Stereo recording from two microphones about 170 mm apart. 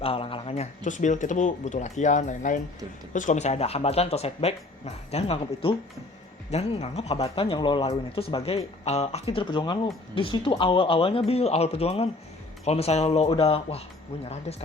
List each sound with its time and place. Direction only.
0.0 s speech: 35° left (ahead or behind)